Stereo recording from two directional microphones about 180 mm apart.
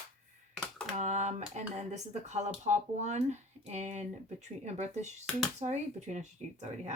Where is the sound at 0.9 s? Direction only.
40° right (ahead or behind).